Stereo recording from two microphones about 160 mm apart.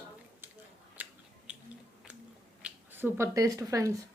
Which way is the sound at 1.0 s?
10° right (ahead or behind).